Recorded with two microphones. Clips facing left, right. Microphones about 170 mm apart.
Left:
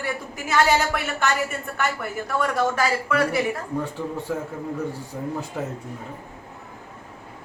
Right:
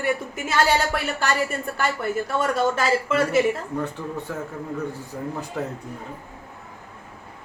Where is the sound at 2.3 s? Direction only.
25° right (ahead or behind).